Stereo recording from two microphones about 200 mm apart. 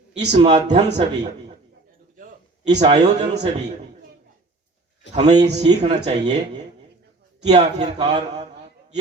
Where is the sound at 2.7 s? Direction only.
35° right (ahead or behind).